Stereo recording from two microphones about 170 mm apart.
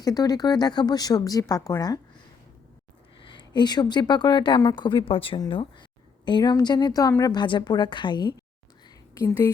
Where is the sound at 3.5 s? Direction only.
25° left (ahead or behind).